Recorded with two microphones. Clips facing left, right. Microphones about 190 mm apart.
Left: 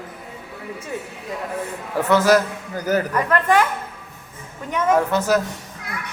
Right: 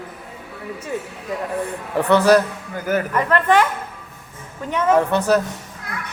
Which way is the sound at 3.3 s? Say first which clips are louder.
Right 2 dB; 10° left (ahead or behind).